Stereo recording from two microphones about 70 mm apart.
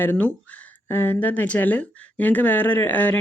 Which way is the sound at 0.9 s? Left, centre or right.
Left.